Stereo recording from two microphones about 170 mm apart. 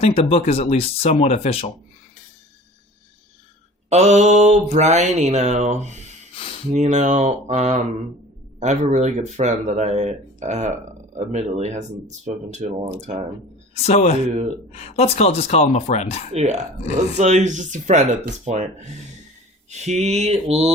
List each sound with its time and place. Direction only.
0.0 s speech: 35° left (ahead or behind)
3.8 s mantra: 40° right (ahead or behind)
6.7 s speech: 45° right (ahead or behind)
13.8 s speech: 40° left (ahead or behind)
16.3 s mantra: 40° right (ahead or behind)
17.2 s speech: 45° right (ahead or behind)
19.7 s mantra: 40° right (ahead or behind)